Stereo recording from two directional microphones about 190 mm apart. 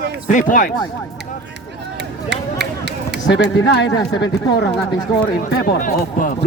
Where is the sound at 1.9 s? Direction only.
65° right (ahead or behind).